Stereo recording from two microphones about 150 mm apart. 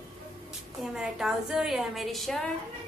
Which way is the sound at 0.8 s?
Centre (ahead or behind).